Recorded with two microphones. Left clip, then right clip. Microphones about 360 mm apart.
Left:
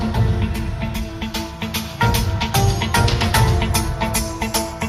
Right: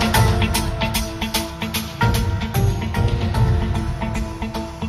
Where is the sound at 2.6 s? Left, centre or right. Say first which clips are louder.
Left 8 dB; left.